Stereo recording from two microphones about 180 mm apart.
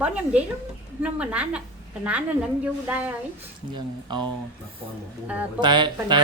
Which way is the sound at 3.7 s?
25° right (ahead or behind).